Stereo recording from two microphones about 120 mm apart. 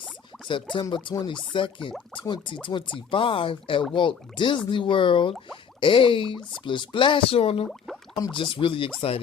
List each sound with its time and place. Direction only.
0.4 s speech: 40° left (ahead or behind)